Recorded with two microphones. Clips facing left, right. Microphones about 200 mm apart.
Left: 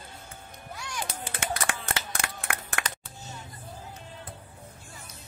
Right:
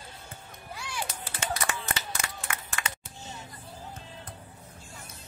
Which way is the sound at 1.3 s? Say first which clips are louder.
Even; 55° left (ahead or behind).